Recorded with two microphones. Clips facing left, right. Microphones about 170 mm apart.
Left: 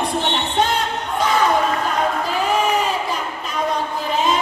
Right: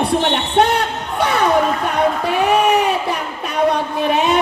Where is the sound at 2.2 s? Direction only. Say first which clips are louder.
Right 5 dB; 65° right (ahead or behind).